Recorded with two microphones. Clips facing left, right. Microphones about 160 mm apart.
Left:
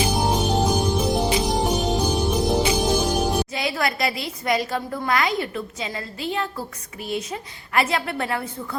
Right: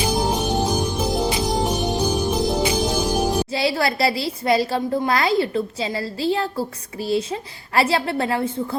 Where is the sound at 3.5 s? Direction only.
30° right (ahead or behind).